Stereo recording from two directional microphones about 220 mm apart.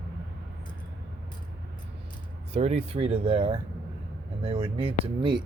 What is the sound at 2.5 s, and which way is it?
Speech, 30° right (ahead or behind).